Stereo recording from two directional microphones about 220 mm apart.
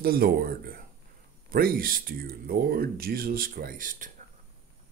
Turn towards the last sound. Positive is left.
turn(degrees=-40)  # may be behind; listen again after turning